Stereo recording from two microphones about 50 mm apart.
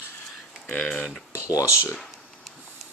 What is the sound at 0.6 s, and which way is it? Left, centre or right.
Speech, left.